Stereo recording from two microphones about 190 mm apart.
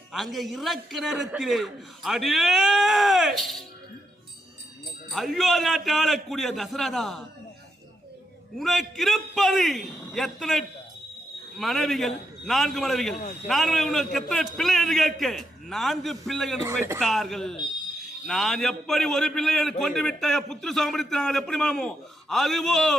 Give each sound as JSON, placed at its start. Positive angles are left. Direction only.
{"t": 0.1, "sound": "a man's voice", "side_deg": 0}
{"t": 5.0, "sound": "a man's voice", "side_deg": 0}
{"t": 8.5, "sound": "a man's voice", "side_deg": 0}
{"t": 13.1, "sound": "speech", "side_deg": 40}
{"t": 13.5, "sound": "a man's voice", "side_deg": 0}